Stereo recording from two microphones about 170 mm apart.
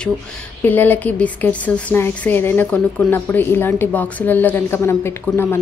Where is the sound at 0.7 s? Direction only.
10° left (ahead or behind).